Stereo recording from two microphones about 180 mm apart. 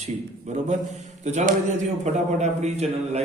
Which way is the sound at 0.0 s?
40° right (ahead or behind).